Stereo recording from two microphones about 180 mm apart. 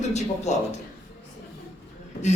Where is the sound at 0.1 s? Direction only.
40° left (ahead or behind).